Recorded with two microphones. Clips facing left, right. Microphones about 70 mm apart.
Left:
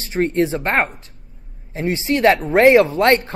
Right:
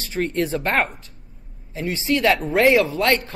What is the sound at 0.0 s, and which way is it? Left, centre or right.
Speech, left.